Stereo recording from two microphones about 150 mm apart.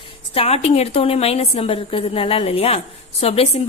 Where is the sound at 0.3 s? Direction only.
45° left (ahead or behind).